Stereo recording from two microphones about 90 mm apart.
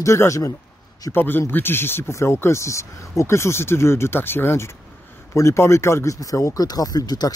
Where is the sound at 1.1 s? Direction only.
25° left (ahead or behind).